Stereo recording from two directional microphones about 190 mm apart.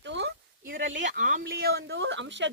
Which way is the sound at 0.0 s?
65° right (ahead or behind).